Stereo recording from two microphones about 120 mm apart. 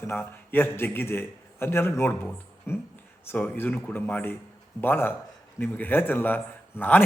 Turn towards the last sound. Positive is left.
turn(degrees=15)  # may be behind; listen again after turning